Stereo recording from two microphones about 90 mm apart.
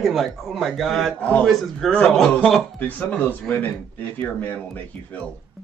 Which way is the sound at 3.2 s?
20° left (ahead or behind).